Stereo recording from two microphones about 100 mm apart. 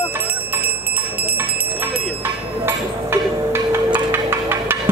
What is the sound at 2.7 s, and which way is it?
Music, 25° right (ahead or behind).